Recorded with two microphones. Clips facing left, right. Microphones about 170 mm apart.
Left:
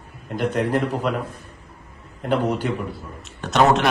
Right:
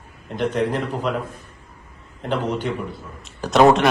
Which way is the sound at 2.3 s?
10° left (ahead or behind).